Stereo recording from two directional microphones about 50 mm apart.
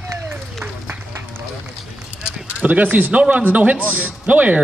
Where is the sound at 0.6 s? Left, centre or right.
Right.